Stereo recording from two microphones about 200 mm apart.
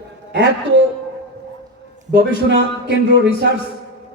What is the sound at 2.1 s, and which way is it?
Speech, 60° right (ahead or behind).